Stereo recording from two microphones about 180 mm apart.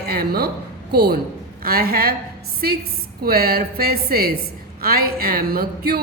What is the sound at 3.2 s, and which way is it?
A woman's voice, 60° right (ahead or behind).